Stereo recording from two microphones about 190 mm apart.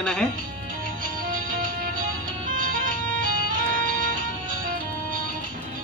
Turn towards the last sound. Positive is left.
turn(degrees=-45)  # may be behind; listen again after turning